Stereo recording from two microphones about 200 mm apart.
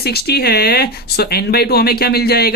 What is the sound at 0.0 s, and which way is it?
Speech, 55° left (ahead or behind).